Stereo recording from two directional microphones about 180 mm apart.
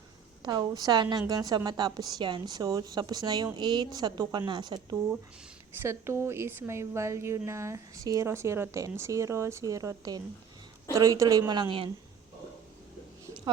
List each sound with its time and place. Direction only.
0.4 s a woman's voice: 20° right (ahead or behind)